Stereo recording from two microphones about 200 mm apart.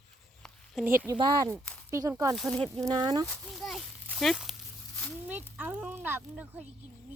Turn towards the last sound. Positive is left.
turn(degrees=-10)  # may be behind; listen again after turning